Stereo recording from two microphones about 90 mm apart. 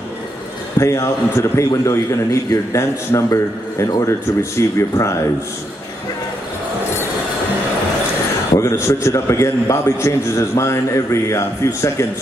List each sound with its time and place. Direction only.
0.7 s a man's voice: 35° left (ahead or behind)
8.5 s a man's voice: 35° left (ahead or behind)